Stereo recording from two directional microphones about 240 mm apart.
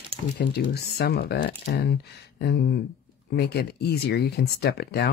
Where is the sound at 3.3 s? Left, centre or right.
Left.